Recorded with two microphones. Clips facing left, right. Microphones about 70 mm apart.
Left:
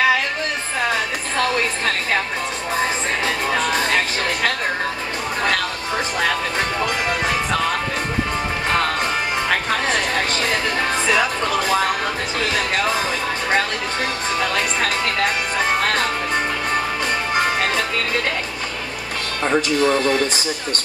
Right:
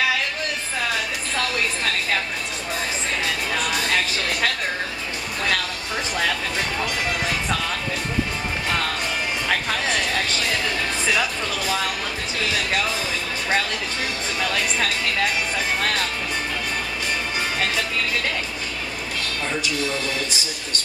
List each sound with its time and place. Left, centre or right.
3.3 s music: left
9.8 s music: left
12.4 s speech: left
17.4 s music: left
19.4 s speech: left